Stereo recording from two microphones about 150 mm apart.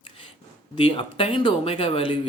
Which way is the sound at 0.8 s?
35° left (ahead or behind).